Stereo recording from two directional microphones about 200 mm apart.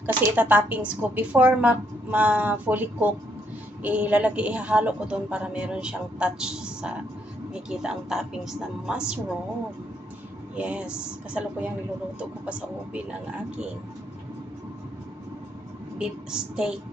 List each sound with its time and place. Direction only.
0.0 s a woman's voice: 10° right (ahead or behind)
10.5 s a man's voice: 5° right (ahead or behind)
16.0 s a man's voice: 5° right (ahead or behind)